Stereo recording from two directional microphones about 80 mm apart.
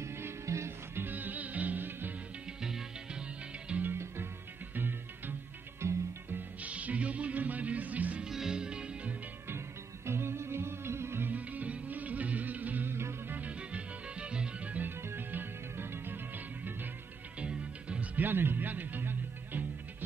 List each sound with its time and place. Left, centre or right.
0.0 s music: right
2.6 s music: centre
3.9 s music: right
6.6 s music: centre
8.3 s music: centre
10.0 s music: right
13.4 s music: centre
17.4 s music: centre